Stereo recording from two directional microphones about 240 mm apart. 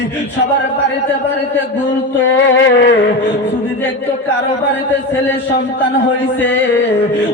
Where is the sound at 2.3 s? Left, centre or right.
Left.